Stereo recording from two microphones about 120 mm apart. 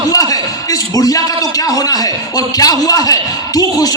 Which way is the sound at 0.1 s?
30° left (ahead or behind).